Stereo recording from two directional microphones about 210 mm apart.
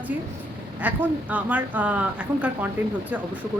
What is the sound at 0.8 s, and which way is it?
A woman's voice, 5° right (ahead or behind).